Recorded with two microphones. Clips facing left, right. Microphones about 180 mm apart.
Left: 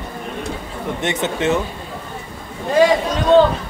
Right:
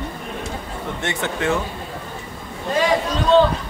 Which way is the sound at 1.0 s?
20° left (ahead or behind).